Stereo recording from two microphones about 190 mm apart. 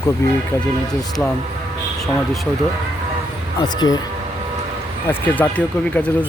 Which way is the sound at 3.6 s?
20° left (ahead or behind).